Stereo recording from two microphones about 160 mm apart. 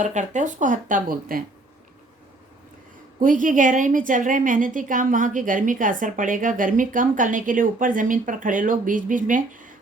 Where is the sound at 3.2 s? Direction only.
55° right (ahead or behind).